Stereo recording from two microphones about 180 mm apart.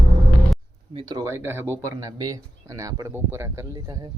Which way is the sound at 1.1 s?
20° right (ahead or behind).